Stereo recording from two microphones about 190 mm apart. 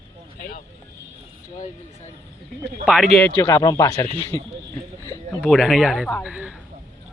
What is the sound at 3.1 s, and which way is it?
Speech, 10° left (ahead or behind).